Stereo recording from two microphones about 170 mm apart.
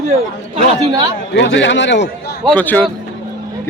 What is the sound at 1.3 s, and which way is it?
Speech, 90° left.